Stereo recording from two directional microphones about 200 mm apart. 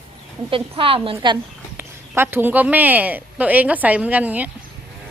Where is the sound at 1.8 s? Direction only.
10° right (ahead or behind).